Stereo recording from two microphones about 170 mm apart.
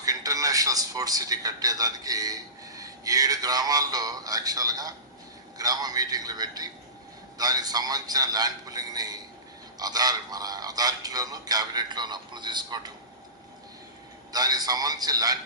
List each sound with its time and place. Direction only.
0.0 s a man's voice: 20° right (ahead or behind)
14.3 s speech: 20° right (ahead or behind)